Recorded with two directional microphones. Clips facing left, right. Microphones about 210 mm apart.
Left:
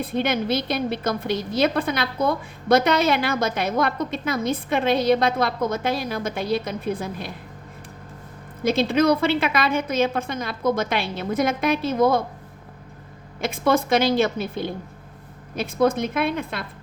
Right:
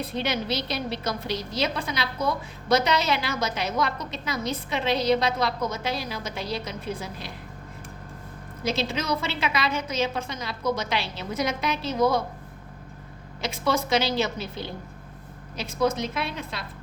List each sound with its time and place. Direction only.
0.0 s a woman's voice: 50° left (ahead or behind)
8.6 s a woman's voice: 55° left (ahead or behind)
13.4 s a woman's voice: 55° left (ahead or behind)